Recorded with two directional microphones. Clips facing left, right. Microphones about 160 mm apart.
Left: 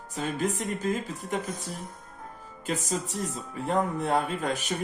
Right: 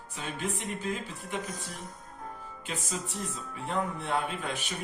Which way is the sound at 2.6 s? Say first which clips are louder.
Left 7 dB; 40° left (ahead or behind).